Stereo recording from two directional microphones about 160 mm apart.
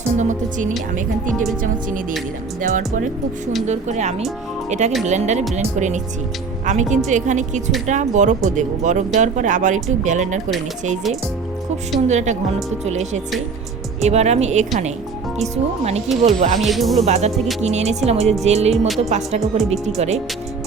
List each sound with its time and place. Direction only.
0.2 s speech: 50° right (ahead or behind)
2.6 s speech: 55° right (ahead or behind)
12.0 s speech: 45° right (ahead or behind)
16.6 s speech: centre (ahead or behind)
17.1 s speech: 45° right (ahead or behind)
18.4 s music: 40° right (ahead or behind)
18.9 s speech: 40° right (ahead or behind)